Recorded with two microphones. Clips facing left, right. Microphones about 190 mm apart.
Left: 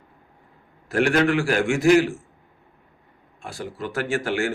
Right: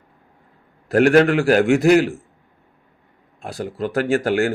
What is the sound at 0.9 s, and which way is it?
Speech, 45° right (ahead or behind).